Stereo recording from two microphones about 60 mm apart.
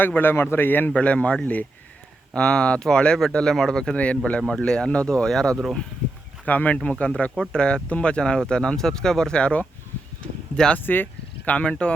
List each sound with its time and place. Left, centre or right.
0.0 s speech: left; by 3.9 s centre
3.9 s speech: left
6.4 s speech: left
10.8 s speech: left; by 11.9 s centre